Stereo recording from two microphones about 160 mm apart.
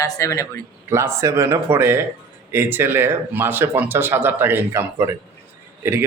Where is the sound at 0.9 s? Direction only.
15° right (ahead or behind).